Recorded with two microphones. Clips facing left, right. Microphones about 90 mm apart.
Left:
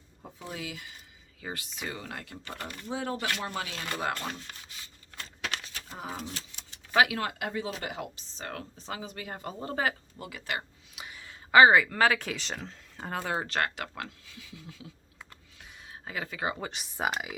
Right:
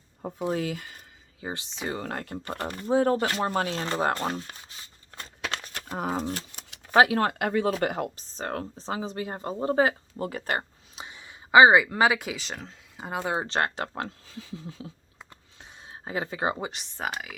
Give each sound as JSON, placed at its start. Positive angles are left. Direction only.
{"t": 0.2, "sound": "speech", "side_deg": -55}
{"t": 1.4, "sound": "speech", "side_deg": -25}
{"t": 2.0, "sound": "speech", "side_deg": -45}
{"t": 5.6, "sound": "a sound", "side_deg": -55}
{"t": 6.1, "sound": "speech", "side_deg": -45}
{"t": 10.2, "sound": "speech", "side_deg": -40}
{"t": 10.9, "sound": "speech", "side_deg": -25}
{"t": 15.2, "sound": "a sound", "side_deg": -25}
{"t": 16.7, "sound": "speech", "side_deg": 5}